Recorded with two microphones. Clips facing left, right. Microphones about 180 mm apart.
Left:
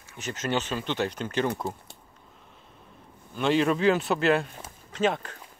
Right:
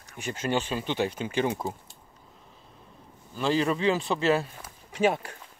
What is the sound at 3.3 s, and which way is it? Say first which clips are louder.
Speech: left 2 dB; centre (ahead or behind).